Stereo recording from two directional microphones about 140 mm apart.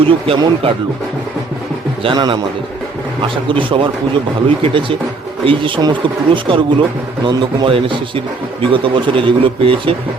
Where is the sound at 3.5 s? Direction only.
40° right (ahead or behind).